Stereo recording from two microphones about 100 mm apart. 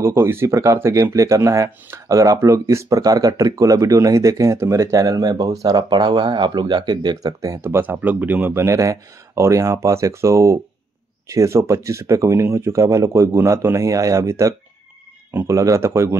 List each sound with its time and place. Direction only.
0.0 s speech: 25° right (ahead or behind)
7.7 s speech: 15° right (ahead or behind)